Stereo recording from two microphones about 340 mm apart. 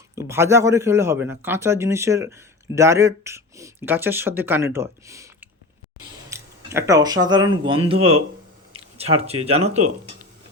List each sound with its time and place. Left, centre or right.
0.2 s speech: centre